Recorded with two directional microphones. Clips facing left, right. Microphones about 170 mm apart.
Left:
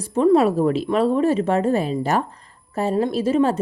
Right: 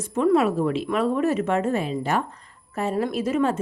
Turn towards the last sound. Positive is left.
turn(degrees=30)  # may be behind; listen again after turning